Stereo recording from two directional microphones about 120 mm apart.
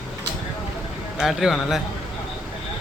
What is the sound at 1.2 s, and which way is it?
Speech, 5° right (ahead or behind).